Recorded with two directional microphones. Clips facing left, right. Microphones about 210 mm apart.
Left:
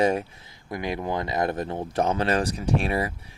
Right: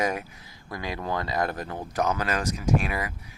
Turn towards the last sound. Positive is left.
turn(degrees=30)  # may be behind; listen again after turning